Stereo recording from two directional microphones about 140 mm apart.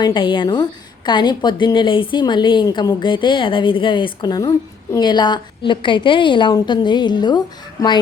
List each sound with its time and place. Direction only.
0.0 s a woman's voice: 35° left (ahead or behind)